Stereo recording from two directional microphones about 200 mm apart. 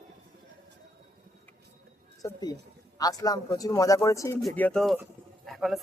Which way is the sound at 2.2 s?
15° left (ahead or behind).